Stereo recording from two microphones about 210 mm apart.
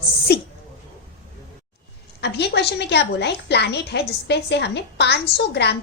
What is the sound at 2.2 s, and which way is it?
A woman's voice, 50° left (ahead or behind).